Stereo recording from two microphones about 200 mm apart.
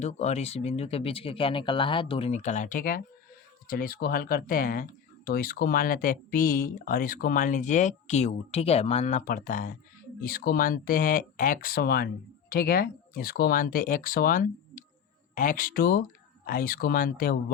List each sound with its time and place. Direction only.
0.0 s speech: 35° left (ahead or behind)